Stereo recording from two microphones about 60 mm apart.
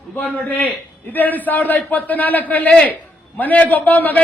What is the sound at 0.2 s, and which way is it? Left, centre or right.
A man's voice, left.